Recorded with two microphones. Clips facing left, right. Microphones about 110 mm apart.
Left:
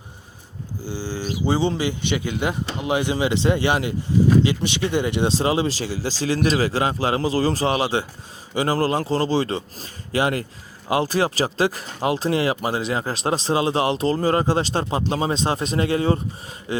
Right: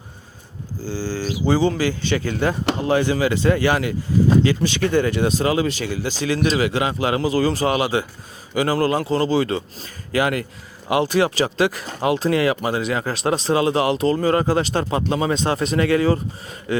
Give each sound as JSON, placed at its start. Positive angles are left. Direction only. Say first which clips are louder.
{"t": 0.9, "sound": "a man's voice", "louder": "right 3 dB", "side_deg": 20}